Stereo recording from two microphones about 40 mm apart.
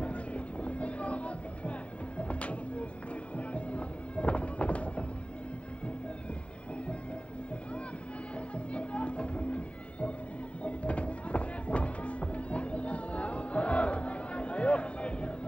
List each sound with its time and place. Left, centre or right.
0.0 s music: left
8.5 s music: left